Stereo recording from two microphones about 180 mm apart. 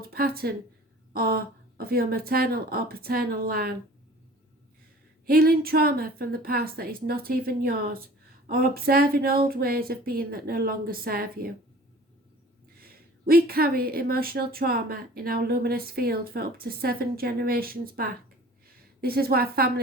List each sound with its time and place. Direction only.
0.1 s speech: 55° right (ahead or behind)
5.2 s speech: 55° right (ahead or behind)
12.8 s speech: 55° right (ahead or behind)